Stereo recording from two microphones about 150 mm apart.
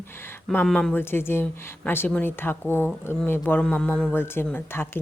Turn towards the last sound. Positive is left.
turn(degrees=15)  # may be behind; listen again after turning